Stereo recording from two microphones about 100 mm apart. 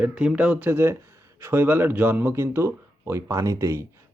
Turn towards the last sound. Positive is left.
turn(degrees=-30)  # may be behind; listen again after turning